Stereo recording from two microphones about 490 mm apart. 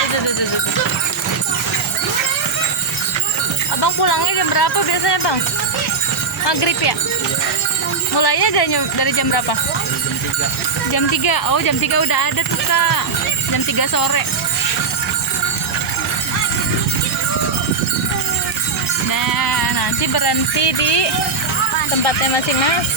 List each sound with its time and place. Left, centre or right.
3.8 s speech: left
6.4 s speech: left
8.1 s speech: left
10.9 s speech: left
19.1 s jingle bell: left